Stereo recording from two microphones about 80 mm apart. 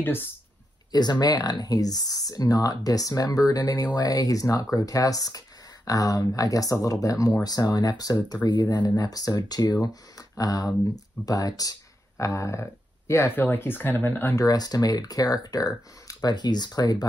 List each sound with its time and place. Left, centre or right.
0.0 s speech: left
0.9 s speech: left
13.5 s speech: left
14.4 s speech: left